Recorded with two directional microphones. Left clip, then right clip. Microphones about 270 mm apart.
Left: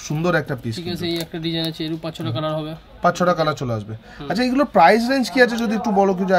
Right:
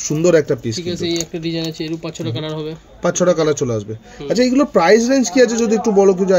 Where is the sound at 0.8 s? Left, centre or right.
Left.